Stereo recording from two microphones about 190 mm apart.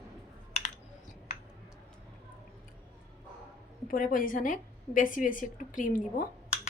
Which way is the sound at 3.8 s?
45° left (ahead or behind).